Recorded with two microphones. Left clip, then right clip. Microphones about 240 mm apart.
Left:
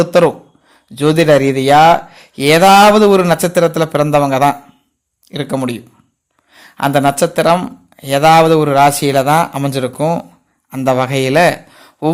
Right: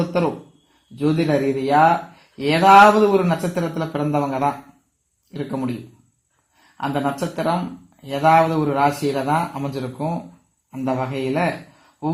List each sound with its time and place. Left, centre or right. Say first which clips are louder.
0.9 s a man's voice: left 10 dB; left
6.7 s a man's voice: left 11 dB; left